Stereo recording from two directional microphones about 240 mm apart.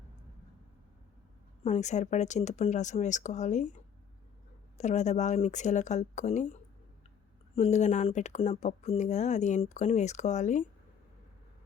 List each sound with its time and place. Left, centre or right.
1.6 s speech: left
4.8 s speech: left